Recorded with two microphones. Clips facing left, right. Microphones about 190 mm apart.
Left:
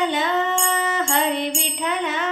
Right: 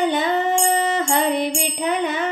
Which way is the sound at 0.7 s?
30° right (ahead or behind).